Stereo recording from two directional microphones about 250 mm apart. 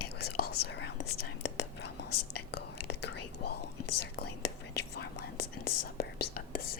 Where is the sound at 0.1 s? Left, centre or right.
Left.